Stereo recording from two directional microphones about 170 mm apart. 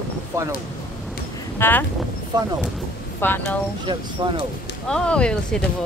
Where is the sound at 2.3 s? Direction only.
25° right (ahead or behind).